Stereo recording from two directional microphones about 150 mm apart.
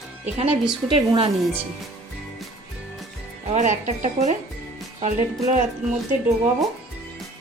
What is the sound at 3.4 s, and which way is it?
Speech, 55° right (ahead or behind).